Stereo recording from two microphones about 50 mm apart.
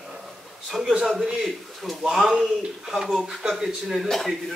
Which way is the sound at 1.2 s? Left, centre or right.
Centre.